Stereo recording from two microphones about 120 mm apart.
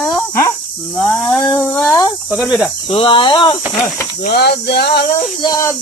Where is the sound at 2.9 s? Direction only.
45° left (ahead or behind).